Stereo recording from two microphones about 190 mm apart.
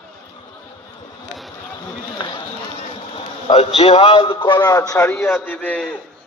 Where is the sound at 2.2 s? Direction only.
25° left (ahead or behind).